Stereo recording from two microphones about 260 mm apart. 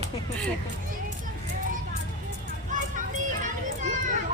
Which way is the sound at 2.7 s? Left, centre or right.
Right.